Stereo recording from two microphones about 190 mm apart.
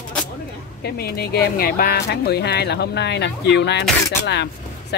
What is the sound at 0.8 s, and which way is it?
Speech, 55° left (ahead or behind).